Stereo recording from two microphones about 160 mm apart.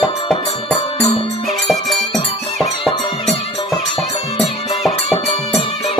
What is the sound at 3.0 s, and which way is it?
Music, 35° left (ahead or behind).